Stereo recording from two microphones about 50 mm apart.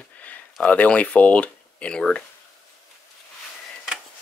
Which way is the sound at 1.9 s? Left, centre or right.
Centre.